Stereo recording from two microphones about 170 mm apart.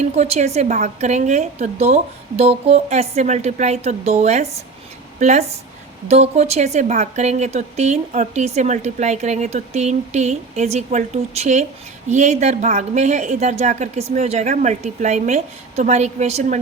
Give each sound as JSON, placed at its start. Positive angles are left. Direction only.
{"t": 0.0, "sound": "a woman's voice", "side_deg": -40}